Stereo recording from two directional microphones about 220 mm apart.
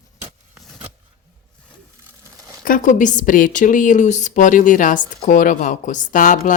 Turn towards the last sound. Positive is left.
turn(degrees=35)  # may be behind; listen again after turning